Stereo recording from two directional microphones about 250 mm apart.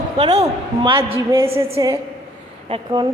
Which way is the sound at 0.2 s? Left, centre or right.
Centre.